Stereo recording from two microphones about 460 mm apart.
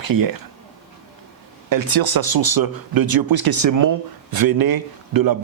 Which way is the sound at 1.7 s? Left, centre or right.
Right.